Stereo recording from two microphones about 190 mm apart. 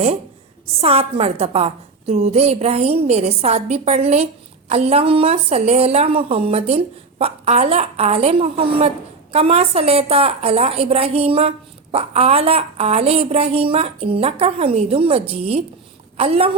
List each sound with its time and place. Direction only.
0.8 s a woman's voice: 30° right (ahead or behind)